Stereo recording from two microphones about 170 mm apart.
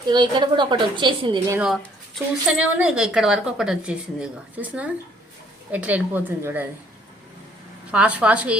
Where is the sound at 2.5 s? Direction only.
5° right (ahead or behind).